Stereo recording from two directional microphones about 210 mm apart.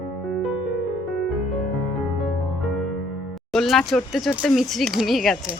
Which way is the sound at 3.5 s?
Centre (ahead or behind).